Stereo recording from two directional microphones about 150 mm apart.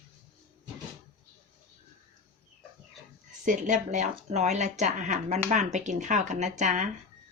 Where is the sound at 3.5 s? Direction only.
55° right (ahead or behind).